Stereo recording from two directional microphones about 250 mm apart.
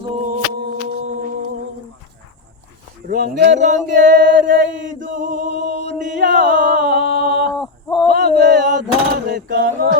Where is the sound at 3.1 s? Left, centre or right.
Right.